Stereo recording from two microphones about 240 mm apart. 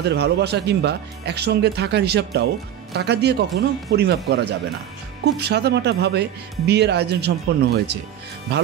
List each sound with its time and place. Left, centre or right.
0.1 s speech: right